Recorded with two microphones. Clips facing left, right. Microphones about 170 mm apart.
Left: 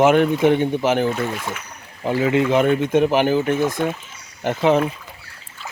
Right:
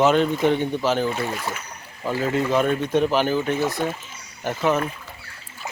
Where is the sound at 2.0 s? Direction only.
20° left (ahead or behind).